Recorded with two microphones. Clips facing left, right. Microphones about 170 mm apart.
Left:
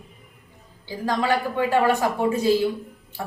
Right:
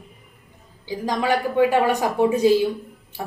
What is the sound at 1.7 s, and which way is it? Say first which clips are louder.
Speech: even; 15° right (ahead or behind).